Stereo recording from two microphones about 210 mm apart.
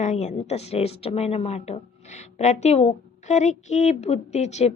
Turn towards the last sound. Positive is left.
turn(degrees=30)  # may be behind; listen again after turning